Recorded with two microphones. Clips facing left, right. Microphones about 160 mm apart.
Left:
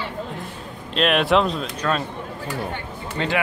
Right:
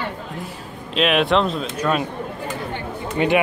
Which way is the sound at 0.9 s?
Centre (ahead or behind).